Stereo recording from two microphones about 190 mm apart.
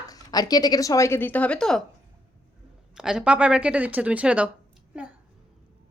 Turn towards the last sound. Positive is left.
turn(degrees=-5)  # may be behind; listen again after turning